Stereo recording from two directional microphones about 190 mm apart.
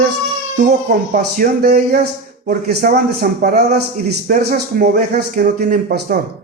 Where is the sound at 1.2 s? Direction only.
55° right (ahead or behind).